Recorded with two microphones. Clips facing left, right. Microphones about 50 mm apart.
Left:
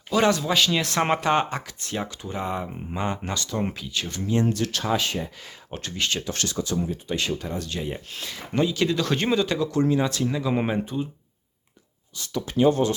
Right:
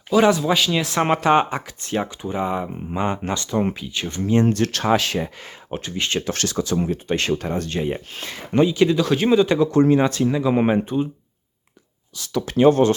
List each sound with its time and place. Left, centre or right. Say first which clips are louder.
0.1 s speech: right 5 dB; centre
3.1 s speech: right 5 dB; right
4.4 s speech: right 5 dB; right
5.7 s speech: right 6 dB; centre
6.0 s speech: right 3 dB; right
6.2 s speech: right 5 dB; right
6.8 s speech: right 5 dB; right
8.6 s speech: right 6 dB; centre
9.0 s speech: right 6 dB; centre
9.4 s speech: right 7 dB; right
10.2 s speech: right 6 dB; centre
10.7 s speech: right 7 dB; right
12.1 s speech: right 4 dB; right